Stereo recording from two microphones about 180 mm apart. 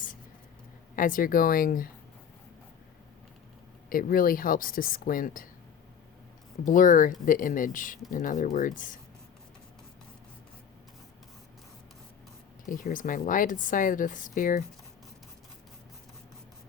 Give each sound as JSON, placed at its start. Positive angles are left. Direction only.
{"t": 0.9, "sound": "a woman's voice", "side_deg": 50}
{"t": 3.8, "sound": "a woman's voice", "side_deg": 50}
{"t": 6.7, "sound": "a woman's voice", "side_deg": 45}
{"t": 12.6, "sound": "a woman's voice", "side_deg": 45}